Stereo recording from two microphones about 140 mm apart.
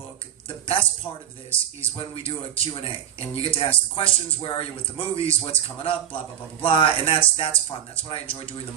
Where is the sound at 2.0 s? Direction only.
40° left (ahead or behind).